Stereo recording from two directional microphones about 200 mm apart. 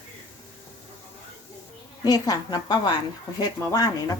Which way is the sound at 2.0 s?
20° left (ahead or behind).